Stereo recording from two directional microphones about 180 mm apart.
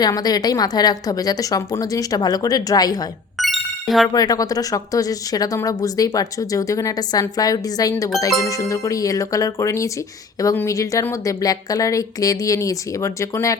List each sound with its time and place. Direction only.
0.0 s speech: 20° left (ahead or behind)
3.3 s music: centre (ahead or behind)
4.1 s a woman's voice: 20° left (ahead or behind)